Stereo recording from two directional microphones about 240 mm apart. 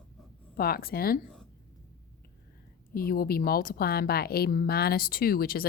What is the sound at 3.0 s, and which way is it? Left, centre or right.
A woman's voice, left.